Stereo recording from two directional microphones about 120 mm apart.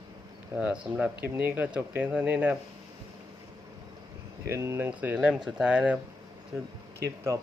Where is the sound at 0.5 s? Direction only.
15° right (ahead or behind).